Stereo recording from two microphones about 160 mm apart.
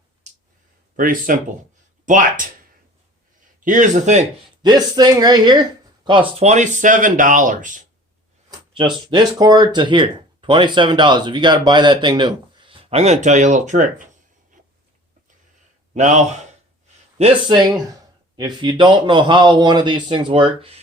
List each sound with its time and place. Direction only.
0.9 s speech: 60° right (ahead or behind)
3.6 s speech: 55° right (ahead or behind)
4.6 s speech: 25° right (ahead or behind)
6.4 s speech: 45° right (ahead or behind)
8.4 s a sound: 30° right (ahead or behind)
9.0 s speech: 25° right (ahead or behind); by 14.1 s 50° right (ahead or behind)
14.5 s writing: 55° right (ahead or behind)
16.0 s speech: 50° right (ahead or behind)
18.3 s speech: 25° right (ahead or behind)